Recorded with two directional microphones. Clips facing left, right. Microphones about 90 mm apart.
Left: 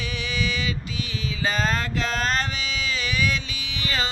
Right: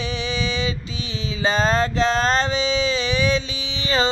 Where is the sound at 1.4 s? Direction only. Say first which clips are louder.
Right 6 dB; 30° right (ahead or behind).